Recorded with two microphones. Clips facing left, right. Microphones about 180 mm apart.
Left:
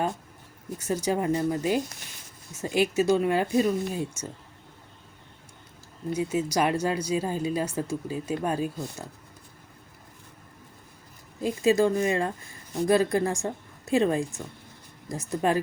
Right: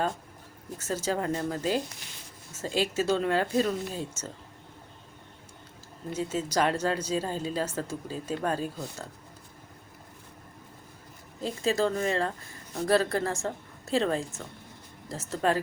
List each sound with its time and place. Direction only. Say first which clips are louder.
0.8 s speech: left 3 dB; 15° left (ahead or behind)
6.1 s speech: left 2 dB; 10° left (ahead or behind)
11.4 s speech: left 5 dB; 15° left (ahead or behind)